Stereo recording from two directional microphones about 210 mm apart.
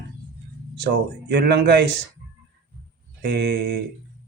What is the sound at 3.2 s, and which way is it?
Speech, 55° right (ahead or behind).